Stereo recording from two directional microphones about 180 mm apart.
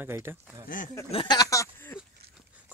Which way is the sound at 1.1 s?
25° left (ahead or behind).